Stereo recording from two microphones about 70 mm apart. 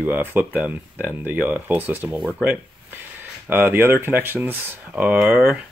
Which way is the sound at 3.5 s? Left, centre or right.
Right.